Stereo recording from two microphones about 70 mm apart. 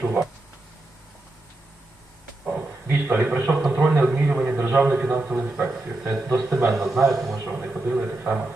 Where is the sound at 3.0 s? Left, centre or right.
Right.